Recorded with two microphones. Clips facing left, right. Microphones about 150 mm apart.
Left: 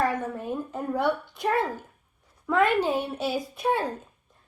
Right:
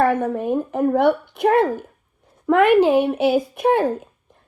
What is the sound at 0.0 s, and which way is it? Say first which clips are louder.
Speech: right 8 dB; 65° right (ahead or behind).